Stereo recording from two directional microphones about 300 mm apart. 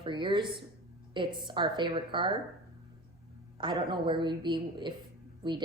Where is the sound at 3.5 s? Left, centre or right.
Centre.